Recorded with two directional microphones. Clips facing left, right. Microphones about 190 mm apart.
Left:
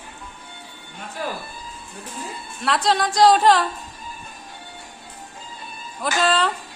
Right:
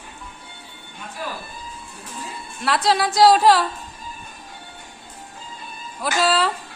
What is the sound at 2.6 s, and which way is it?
A woman's voice, centre (ahead or behind).